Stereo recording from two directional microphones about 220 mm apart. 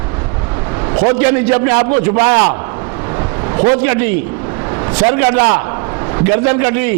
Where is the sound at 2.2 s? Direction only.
15° right (ahead or behind).